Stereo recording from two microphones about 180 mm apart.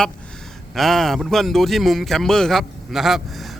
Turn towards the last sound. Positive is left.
turn(degrees=0)  # may be behind; listen again after turning